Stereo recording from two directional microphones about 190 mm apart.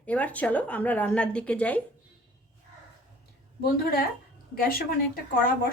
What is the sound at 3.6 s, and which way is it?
Speech, 50° left (ahead or behind).